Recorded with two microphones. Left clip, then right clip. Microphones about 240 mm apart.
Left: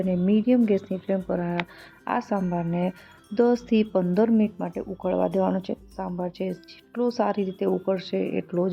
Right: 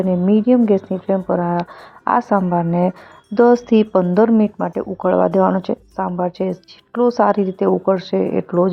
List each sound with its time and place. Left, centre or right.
0.0 s speech: centre